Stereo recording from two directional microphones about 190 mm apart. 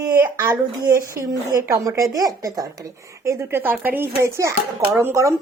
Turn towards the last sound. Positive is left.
turn(degrees=-15)  # may be behind; listen again after turning